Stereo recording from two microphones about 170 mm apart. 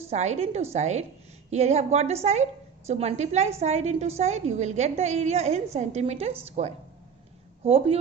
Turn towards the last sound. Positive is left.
turn(degrees=-35)  # may be behind; listen again after turning